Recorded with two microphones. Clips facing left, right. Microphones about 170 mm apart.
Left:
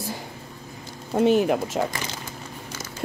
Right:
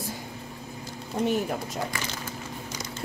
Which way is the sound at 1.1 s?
90° left.